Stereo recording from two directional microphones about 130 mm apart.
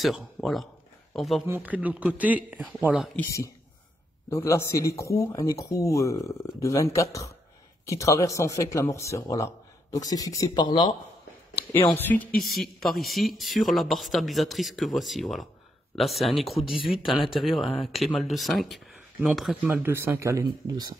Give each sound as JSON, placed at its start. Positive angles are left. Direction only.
{"t": 0.0, "sound": "speech", "side_deg": 0}
{"t": 1.5, "sound": "speech", "side_deg": -10}
{"t": 4.3, "sound": "speech", "side_deg": 20}
{"t": 11.9, "sound": "speech", "side_deg": 15}
{"t": 12.4, "sound": "speech", "side_deg": 0}